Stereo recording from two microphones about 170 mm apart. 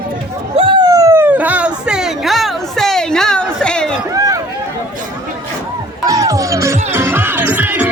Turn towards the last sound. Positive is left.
turn(degrees=-10)  # may be behind; listen again after turning